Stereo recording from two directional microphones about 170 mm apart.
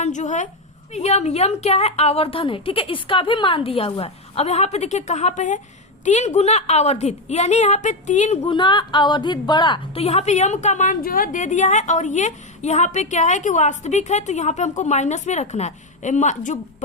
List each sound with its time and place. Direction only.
0.0 s a woman's voice: 45° left (ahead or behind)
8.4 s a woman's voice: 30° left (ahead or behind); by 16.6 s 45° left (ahead or behind)